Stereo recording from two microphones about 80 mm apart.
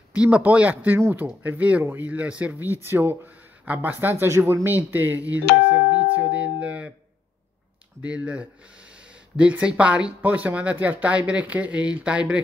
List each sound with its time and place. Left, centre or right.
0.1 s speech: centre
8.0 s speech: centre